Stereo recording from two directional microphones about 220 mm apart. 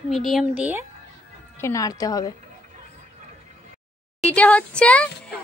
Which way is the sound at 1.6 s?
15° left (ahead or behind).